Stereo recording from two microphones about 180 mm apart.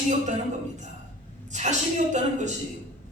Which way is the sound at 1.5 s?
40° right (ahead or behind).